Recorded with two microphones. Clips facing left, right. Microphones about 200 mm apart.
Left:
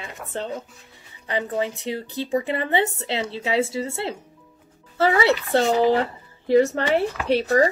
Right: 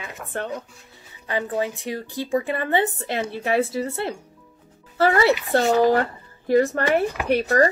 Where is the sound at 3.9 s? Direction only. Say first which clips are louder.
Right 1 dB; 25° left (ahead or behind).